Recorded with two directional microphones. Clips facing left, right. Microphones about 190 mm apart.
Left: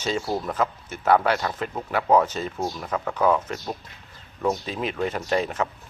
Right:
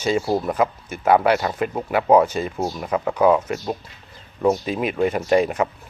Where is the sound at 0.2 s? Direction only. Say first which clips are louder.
Right 6 dB; 25° right (ahead or behind).